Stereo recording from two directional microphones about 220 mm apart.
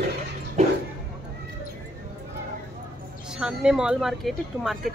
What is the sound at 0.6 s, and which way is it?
Bow-wow, 30° right (ahead or behind).